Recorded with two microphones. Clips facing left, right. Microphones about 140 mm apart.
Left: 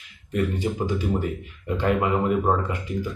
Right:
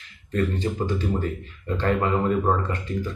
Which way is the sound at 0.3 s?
10° left (ahead or behind).